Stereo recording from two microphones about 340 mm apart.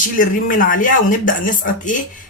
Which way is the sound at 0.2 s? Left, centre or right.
Left.